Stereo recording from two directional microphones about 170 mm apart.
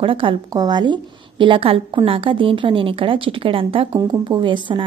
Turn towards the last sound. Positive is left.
turn(degrees=-30)  # may be behind; listen again after turning